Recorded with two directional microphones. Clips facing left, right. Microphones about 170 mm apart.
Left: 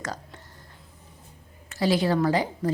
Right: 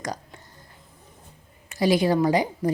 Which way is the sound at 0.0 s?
15° right (ahead or behind).